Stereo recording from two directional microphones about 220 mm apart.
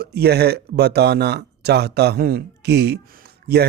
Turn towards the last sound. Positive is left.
turn(degrees=-45)  # may be behind; listen again after turning